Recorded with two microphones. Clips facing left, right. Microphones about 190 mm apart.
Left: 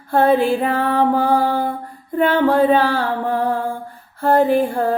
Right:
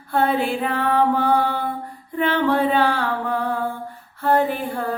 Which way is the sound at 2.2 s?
45° left (ahead or behind).